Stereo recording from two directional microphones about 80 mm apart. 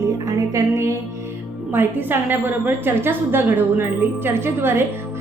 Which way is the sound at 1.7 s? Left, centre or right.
Right.